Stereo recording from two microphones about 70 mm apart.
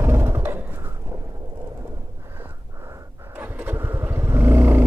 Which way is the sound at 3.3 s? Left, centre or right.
Right.